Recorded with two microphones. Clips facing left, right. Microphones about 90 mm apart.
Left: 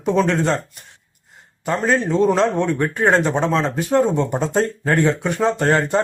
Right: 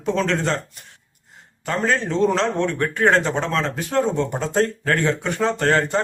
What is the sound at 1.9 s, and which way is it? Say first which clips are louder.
Speech: left 3 dB; 10° left (ahead or behind).